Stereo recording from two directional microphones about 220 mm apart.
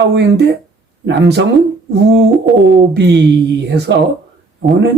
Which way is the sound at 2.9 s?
50° right (ahead or behind).